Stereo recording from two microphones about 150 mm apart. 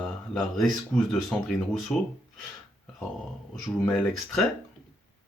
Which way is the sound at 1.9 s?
5° left (ahead or behind).